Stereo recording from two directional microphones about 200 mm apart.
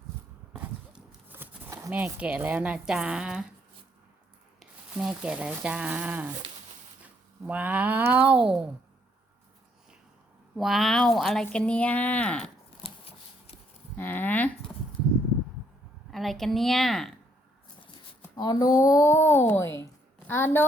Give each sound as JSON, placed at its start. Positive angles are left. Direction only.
{"t": 0.5, "sound": "horse", "side_deg": -10}
{"t": 4.6, "sound": "speech", "side_deg": -5}
{"t": 10.6, "sound": "speech", "side_deg": 0}
{"t": 12.8, "sound": "a sound", "side_deg": 30}
{"t": 13.9, "sound": "a sound", "side_deg": 10}
{"t": 16.1, "sound": "speech", "side_deg": 0}
{"t": 18.2, "sound": "a woman's voice", "side_deg": 20}